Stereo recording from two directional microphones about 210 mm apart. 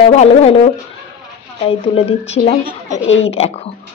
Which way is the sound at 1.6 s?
25° left (ahead or behind).